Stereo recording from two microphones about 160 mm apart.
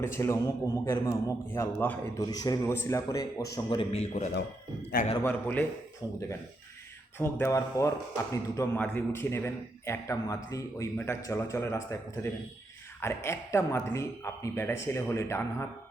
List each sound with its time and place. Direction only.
0.0 s a man's voice: 15° left (ahead or behind)
3.9 s speech: 45° left (ahead or behind)
5.2 s speech: 10° left (ahead or behind)
7.2 s speech: 15° left (ahead or behind)